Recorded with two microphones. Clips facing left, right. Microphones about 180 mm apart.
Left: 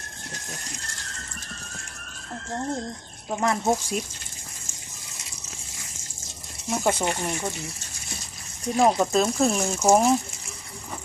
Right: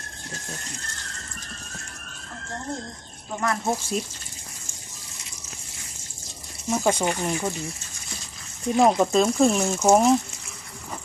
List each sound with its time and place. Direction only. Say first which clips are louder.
3.4 s speech: left 2 dB; 20° left (ahead or behind)
6.7 s speech: right 2 dB; centre (ahead or behind)
8.7 s speech: right 2 dB; centre (ahead or behind)